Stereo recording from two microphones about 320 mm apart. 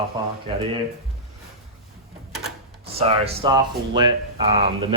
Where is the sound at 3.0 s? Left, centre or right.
Centre.